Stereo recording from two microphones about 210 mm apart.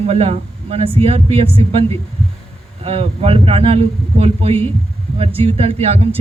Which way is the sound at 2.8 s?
30° right (ahead or behind).